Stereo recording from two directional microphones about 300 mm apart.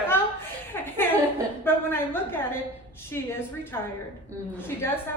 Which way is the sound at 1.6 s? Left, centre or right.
Centre.